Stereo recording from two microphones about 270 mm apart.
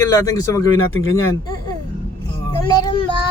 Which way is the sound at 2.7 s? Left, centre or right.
Centre.